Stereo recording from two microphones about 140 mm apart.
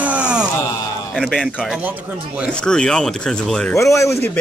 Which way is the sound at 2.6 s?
5° left (ahead or behind).